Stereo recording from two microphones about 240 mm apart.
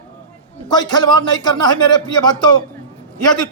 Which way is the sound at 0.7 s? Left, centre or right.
Centre.